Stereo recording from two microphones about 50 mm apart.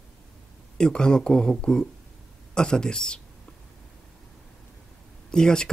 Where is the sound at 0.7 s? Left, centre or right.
Centre.